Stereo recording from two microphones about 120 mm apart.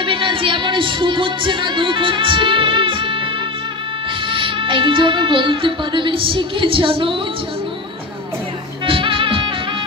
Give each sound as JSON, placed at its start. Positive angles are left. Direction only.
{"t": 0.0, "sound": "music", "side_deg": -45}
{"t": 4.3, "sound": "speech", "side_deg": -45}
{"t": 8.8, "sound": "music", "side_deg": -45}